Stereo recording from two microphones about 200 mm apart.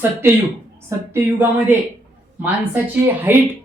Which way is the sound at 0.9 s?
15° right (ahead or behind).